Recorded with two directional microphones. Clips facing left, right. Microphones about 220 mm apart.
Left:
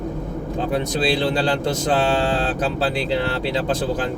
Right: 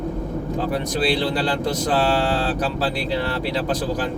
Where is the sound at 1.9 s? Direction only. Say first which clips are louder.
Left 1 dB; 20° left (ahead or behind).